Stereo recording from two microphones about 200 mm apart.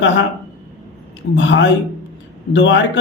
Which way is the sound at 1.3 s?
65° left (ahead or behind).